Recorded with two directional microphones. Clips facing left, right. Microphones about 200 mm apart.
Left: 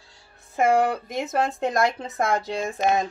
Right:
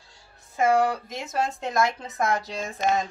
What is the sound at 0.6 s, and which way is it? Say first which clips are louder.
Speech: left 1 dB; 55° left (ahead or behind).